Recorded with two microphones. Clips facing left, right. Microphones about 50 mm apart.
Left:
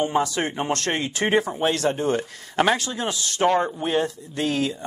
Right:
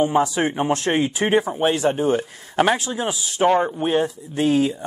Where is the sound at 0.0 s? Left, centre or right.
Centre.